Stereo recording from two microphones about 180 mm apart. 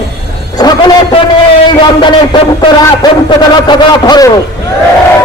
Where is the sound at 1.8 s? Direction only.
25° left (ahead or behind).